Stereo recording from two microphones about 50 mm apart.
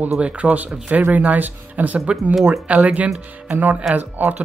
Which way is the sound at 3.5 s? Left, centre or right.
Right.